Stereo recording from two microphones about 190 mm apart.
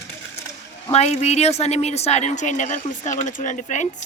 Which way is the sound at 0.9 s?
35° left (ahead or behind).